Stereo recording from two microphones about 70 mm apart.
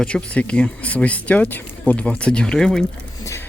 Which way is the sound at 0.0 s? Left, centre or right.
Centre.